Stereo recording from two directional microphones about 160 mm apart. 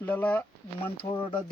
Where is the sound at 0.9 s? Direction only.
35° left (ahead or behind).